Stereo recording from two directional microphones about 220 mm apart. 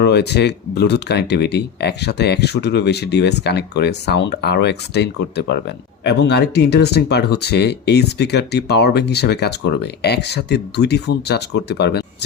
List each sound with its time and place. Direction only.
0.0 s speech: 50° left (ahead or behind)